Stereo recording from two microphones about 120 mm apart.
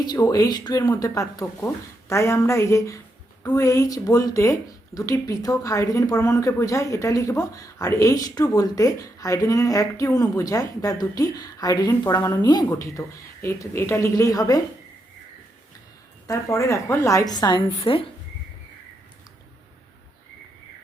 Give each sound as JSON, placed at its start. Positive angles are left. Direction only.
{"t": 0.0, "sound": "a woman's voice", "side_deg": 35}
{"t": 12.6, "sound": "speech", "side_deg": 25}
{"t": 16.2, "sound": "speech", "side_deg": 25}
{"t": 17.9, "sound": "speech", "side_deg": 50}